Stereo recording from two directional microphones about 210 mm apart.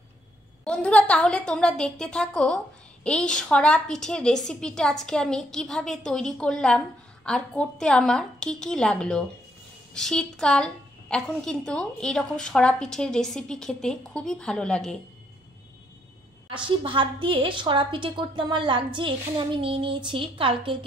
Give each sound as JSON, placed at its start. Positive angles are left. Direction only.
{"t": 0.7, "sound": "a woman's voice", "side_deg": 5}
{"t": 16.8, "sound": "a woman's voice", "side_deg": -25}